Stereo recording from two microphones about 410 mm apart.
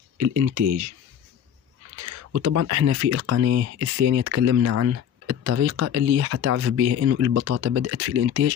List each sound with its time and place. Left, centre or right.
0.2 s speech: right
2.0 s speech: right